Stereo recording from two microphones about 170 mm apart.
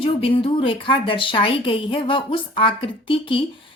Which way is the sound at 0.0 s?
30° left (ahead or behind).